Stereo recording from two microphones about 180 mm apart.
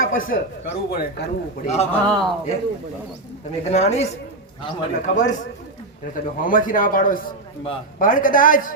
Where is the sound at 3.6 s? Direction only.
40° left (ahead or behind).